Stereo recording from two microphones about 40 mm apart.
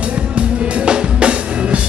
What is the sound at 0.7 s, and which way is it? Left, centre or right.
Drum kit, right.